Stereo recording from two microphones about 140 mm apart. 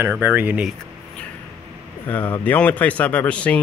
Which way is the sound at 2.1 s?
10° left (ahead or behind).